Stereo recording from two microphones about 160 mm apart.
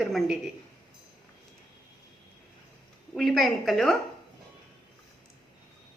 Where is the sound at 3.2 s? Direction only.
Centre (ahead or behind).